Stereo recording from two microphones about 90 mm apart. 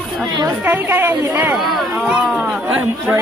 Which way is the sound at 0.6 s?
25° right (ahead or behind).